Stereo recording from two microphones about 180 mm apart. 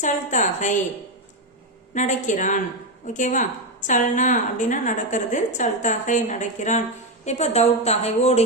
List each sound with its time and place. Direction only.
0.0 s a woman's voice: 45° left (ahead or behind)
1.9 s a woman's voice: 45° left (ahead or behind)